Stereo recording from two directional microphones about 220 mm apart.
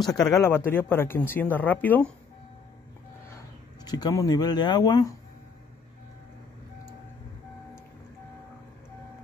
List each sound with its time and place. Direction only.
0.3 s speech: 10° left (ahead or behind)
3.8 s speech: 20° left (ahead or behind)